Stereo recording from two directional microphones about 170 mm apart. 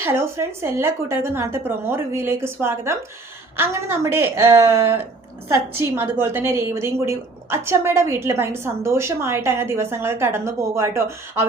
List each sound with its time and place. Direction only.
0.0 s a woman's voice: 15° right (ahead or behind)